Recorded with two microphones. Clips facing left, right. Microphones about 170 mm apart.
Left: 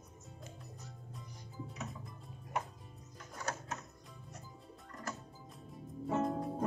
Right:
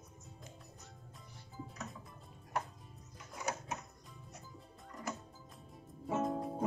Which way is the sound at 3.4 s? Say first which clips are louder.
Right 1 dB; 15° right (ahead or behind).